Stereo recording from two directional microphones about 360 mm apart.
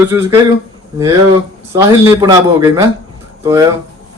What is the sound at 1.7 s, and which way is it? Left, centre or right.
A man's voice, centre.